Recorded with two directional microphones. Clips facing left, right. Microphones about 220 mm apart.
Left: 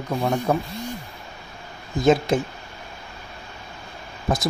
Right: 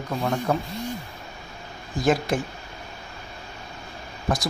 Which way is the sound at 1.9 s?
25° left (ahead or behind).